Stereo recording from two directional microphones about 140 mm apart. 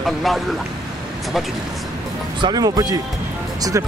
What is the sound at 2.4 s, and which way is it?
Speech, 30° right (ahead or behind).